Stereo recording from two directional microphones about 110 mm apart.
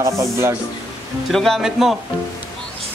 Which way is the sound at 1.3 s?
Centre (ahead or behind).